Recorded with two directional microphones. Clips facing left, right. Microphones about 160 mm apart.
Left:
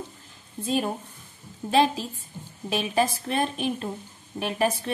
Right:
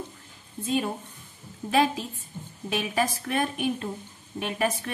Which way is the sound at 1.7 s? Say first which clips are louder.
Left 2 dB; 30° left (ahead or behind).